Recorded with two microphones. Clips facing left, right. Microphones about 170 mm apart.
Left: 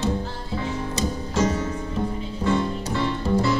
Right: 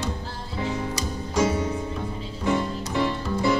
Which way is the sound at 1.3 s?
15° right (ahead or behind).